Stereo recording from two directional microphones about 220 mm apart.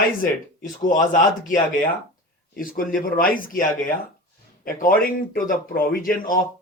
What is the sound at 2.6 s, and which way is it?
Speech, 40° left (ahead or behind).